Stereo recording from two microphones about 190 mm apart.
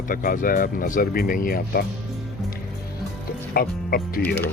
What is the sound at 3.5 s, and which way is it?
Speech, 55° left (ahead or behind).